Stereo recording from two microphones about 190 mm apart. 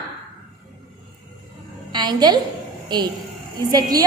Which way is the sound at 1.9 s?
25° right (ahead or behind).